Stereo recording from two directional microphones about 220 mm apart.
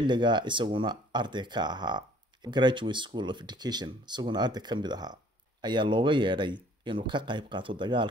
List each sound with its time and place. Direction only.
0.0 s speech: 20° right (ahead or behind)